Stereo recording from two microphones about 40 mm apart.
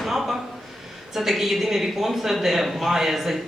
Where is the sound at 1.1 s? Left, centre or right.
Centre.